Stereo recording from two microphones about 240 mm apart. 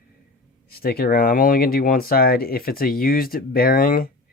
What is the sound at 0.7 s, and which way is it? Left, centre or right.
Speech, left.